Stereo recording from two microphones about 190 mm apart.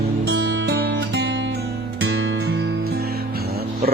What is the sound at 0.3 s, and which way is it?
Music, 60° right (ahead or behind).